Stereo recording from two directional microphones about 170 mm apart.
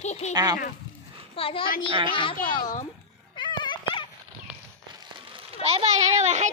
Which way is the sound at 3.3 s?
25° left (ahead or behind).